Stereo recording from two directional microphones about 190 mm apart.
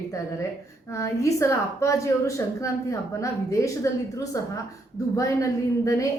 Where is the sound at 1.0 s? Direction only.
15° left (ahead or behind).